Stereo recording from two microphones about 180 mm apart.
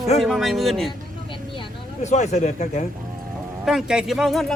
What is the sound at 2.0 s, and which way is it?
Speech, 40° left (ahead or behind).